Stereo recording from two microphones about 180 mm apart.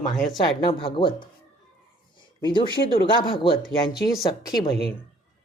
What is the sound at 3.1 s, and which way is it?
Speech, 25° left (ahead or behind).